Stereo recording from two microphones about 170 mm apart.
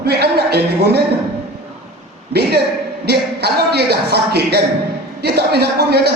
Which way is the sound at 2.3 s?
70° right (ahead or behind).